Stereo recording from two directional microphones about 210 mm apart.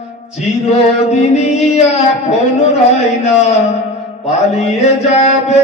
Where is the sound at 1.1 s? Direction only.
30° left (ahead or behind).